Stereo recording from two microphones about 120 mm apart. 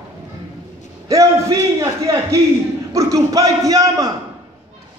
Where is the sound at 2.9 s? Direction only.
25° right (ahead or behind).